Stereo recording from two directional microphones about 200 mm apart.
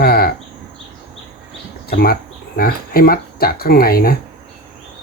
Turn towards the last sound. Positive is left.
turn(degrees=50)  # may be behind; listen again after turning